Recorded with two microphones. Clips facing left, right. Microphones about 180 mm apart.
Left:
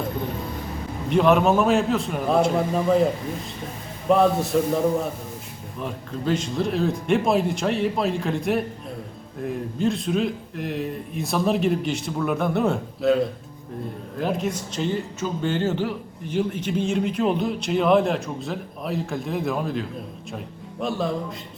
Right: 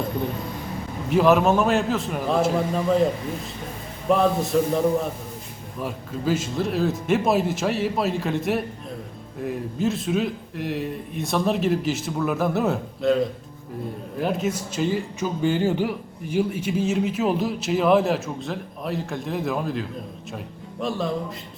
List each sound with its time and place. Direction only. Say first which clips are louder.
1.1 s a man's voice: even; centre (ahead or behind)
4.1 s a man's voice: left 1 dB; centre (ahead or behind)
5.8 s a man's voice: right 1 dB; 5° right (ahead or behind)
14.2 s a man's voice: right 1 dB; 5° right (ahead or behind)